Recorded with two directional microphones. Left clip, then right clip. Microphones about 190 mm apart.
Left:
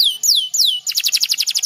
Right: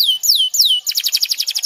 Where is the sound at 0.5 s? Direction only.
15° left (ahead or behind).